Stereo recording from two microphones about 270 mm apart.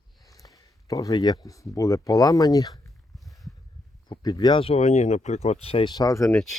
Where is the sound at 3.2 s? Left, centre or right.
Centre.